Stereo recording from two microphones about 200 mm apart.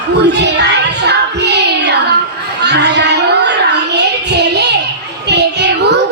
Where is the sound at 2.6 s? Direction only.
55° right (ahead or behind).